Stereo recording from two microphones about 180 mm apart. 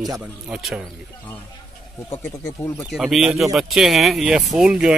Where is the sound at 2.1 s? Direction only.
15° left (ahead or behind).